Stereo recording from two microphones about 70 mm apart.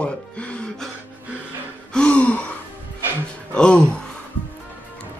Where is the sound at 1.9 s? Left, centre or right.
Centre.